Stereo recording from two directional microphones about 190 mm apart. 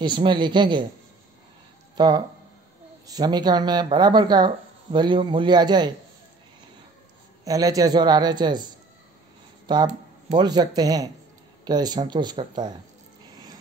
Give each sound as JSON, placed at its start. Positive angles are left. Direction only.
{"t": 0.0, "sound": "speech", "side_deg": -25}
{"t": 2.0, "sound": "speech", "side_deg": -20}
{"t": 7.4, "sound": "speech", "side_deg": -20}
{"t": 9.7, "sound": "speech", "side_deg": -25}